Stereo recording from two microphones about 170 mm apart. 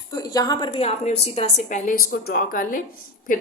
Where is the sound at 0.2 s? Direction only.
20° left (ahead or behind).